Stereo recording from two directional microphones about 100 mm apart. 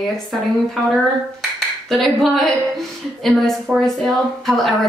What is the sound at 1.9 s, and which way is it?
A woman's voice, centre (ahead or behind).